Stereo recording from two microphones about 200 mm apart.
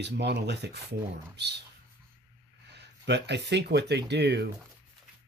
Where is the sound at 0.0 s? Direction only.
60° right (ahead or behind).